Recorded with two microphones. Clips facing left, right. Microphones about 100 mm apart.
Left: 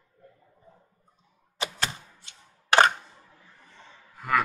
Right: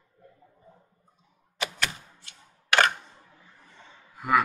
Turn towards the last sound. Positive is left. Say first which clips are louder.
# right 2 dB
turn(degrees=-10)  # may be behind; listen again after turning